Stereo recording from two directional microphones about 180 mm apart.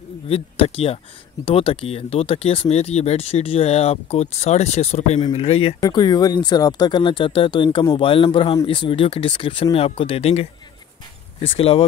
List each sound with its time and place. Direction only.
0.3 s speech: 35° left (ahead or behind)